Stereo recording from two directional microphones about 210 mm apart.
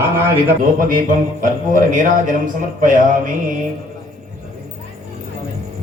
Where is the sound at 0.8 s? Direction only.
40° right (ahead or behind).